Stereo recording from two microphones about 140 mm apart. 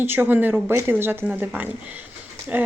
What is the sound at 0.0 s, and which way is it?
Speech, 15° right (ahead or behind).